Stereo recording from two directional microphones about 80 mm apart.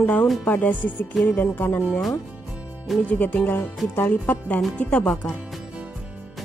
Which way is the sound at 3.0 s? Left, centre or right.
Centre.